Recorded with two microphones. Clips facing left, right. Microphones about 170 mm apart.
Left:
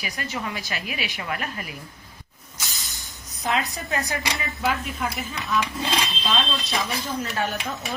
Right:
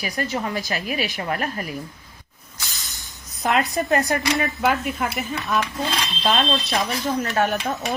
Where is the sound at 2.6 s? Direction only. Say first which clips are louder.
Even; centre (ahead or behind).